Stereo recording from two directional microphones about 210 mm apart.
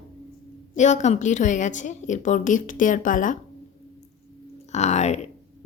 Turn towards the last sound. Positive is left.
turn(degrees=30)  # may be behind; listen again after turning